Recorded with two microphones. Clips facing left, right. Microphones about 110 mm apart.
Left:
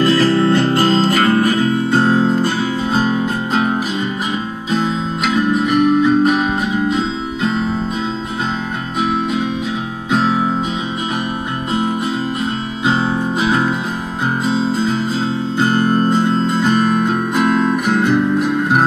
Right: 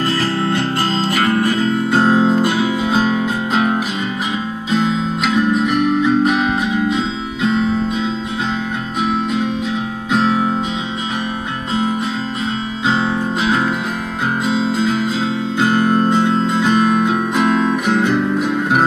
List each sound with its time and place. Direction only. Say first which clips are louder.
0.5 s music: left 5 dB; 40° left (ahead or behind)
1.6 s guitar: even; 5° left (ahead or behind)
4.6 s music: right 1 dB; centre (ahead or behind)
9.0 s music: even; centre (ahead or behind)
12.8 s music: left 1 dB; 5° left (ahead or behind)
15.0 s music: even; 40° left (ahead or behind)
15.9 s music: even; centre (ahead or behind)